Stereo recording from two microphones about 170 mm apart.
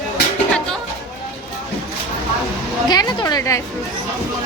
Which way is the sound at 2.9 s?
25° left (ahead or behind).